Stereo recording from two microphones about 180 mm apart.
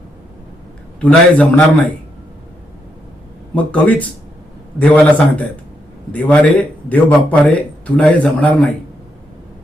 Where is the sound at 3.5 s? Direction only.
10° left (ahead or behind).